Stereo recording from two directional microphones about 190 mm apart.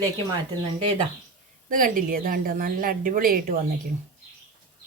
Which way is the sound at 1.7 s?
45° right (ahead or behind).